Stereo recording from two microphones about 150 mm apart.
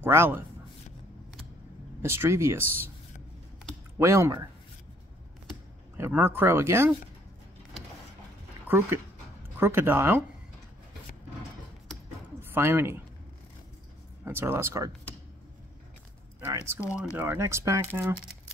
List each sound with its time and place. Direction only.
0.0 s speech: 15° right (ahead or behind)
2.0 s speech: 15° right (ahead or behind)
4.0 s speech: 20° right (ahead or behind)
5.9 s speech: 15° right (ahead or behind)
8.6 s speech: 15° right (ahead or behind)
12.4 s speech: 15° right (ahead or behind)
14.2 s speech: 15° right (ahead or behind)
16.3 s speech: 15° right (ahead or behind)